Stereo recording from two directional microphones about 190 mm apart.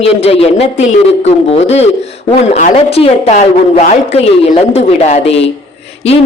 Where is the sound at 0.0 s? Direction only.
30° left (ahead or behind).